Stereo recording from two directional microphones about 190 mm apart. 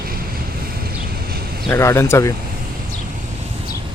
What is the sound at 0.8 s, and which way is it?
Vehicle, 50° right (ahead or behind).